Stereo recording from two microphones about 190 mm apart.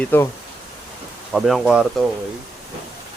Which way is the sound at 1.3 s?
Centre (ahead or behind).